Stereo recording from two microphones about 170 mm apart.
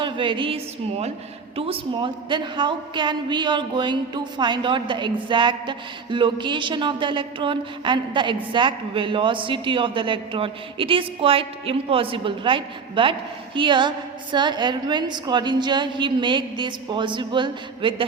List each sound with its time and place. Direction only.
0.0 s a man's voice: 30° right (ahead or behind)